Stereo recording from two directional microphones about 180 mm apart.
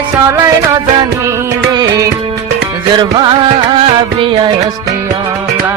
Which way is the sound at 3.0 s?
25° right (ahead or behind).